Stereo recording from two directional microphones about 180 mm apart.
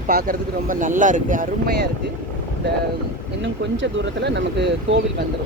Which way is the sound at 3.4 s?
85° right.